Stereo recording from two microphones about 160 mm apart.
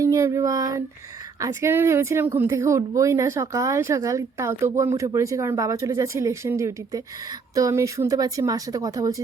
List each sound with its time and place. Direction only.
0.0 s child singing: 20° right (ahead or behind)
1.4 s speech: 20° right (ahead or behind)